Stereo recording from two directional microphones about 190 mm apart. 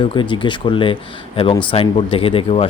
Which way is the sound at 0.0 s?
25° left (ahead or behind).